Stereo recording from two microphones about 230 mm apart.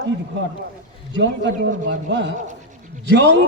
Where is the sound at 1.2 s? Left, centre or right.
Right.